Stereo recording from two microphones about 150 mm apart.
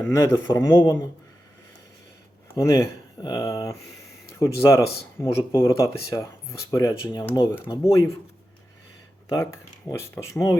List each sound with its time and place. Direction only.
0.0 s speech: 20° left (ahead or behind)
2.6 s speech: 20° left (ahead or behind)
9.3 s speech: 15° left (ahead or behind)